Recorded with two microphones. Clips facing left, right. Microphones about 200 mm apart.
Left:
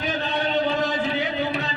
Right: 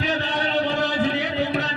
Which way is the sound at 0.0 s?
80° right.